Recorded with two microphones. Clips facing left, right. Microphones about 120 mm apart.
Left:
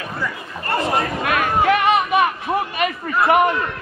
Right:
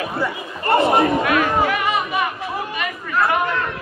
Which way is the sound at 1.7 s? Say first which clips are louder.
Left 5 dB; 65° left (ahead or behind).